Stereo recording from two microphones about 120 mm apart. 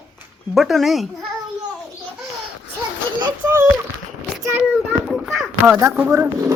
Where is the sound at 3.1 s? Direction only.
20° right (ahead or behind).